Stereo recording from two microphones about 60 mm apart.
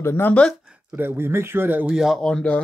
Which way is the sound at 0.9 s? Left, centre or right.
Right.